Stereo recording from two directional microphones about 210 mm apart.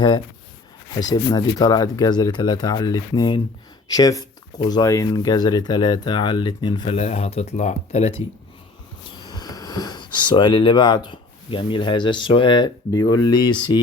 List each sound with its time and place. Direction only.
0.9 s speech: 20° left (ahead or behind)
9.2 s speech: 20° left (ahead or behind)